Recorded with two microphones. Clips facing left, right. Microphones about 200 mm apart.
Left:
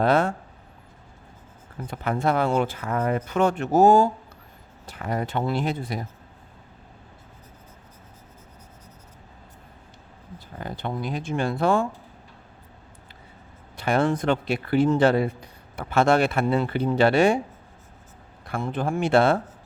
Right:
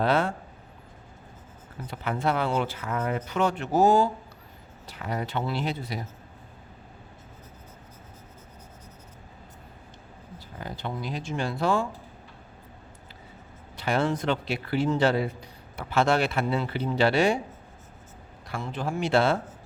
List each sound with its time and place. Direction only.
0.0 s speech: 45° left (ahead or behind)
1.9 s speech: 45° left (ahead or behind)
10.6 s speech: 50° left (ahead or behind)
13.7 s speech: 50° left (ahead or behind)
18.4 s speech: 55° left (ahead or behind)